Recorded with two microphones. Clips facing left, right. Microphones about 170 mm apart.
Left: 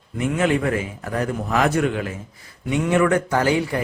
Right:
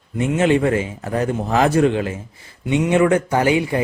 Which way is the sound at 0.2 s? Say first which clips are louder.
Right 4 dB; 25° right (ahead or behind).